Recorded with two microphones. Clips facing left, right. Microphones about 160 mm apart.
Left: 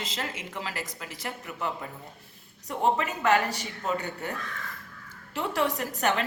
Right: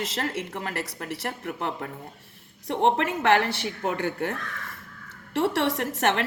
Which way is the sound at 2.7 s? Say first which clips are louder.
Right 3 dB; 75° right (ahead or behind).